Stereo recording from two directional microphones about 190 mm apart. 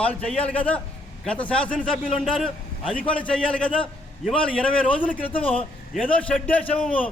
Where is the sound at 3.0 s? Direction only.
5° left (ahead or behind).